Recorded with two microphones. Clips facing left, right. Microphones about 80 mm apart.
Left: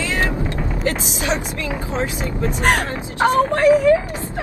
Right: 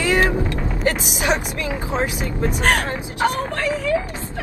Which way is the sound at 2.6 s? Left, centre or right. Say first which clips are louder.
Left 2 dB; left.